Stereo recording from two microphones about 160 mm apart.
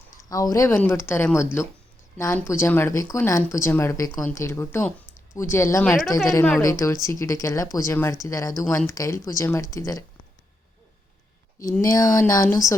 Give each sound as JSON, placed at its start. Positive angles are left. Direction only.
{"t": 0.3, "sound": "speech", "side_deg": 20}
{"t": 11.8, "sound": "speech", "side_deg": 20}